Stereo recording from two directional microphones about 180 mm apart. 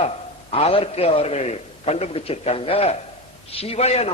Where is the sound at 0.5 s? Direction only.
30° left (ahead or behind).